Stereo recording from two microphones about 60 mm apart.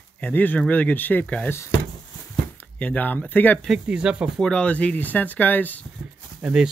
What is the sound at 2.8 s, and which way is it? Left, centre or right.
Speech, left.